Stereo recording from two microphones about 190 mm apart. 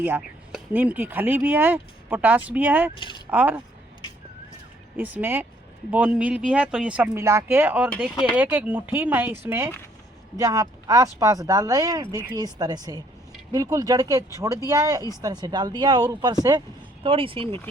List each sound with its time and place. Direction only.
0.0 s speech: 10° right (ahead or behind)
2.9 s speech: 25° left (ahead or behind)
3.2 s speech: 10° right (ahead or behind)
4.9 s speech: 10° right (ahead or behind); by 17.6 s 25° right (ahead or behind)